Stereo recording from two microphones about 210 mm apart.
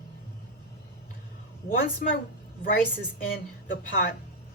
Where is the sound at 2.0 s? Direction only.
40° left (ahead or behind).